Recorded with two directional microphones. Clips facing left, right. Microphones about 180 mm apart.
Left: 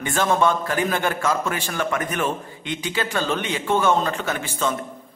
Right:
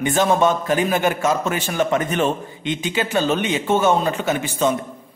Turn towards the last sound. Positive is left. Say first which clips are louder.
# right 5 dB
turn(degrees=-15)  # may be behind; listen again after turning